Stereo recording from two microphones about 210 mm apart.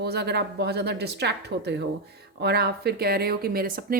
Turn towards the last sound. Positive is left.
turn(degrees=-45)  # may be behind; listen again after turning